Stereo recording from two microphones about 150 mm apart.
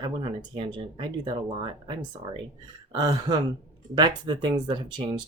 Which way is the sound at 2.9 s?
30° right (ahead or behind).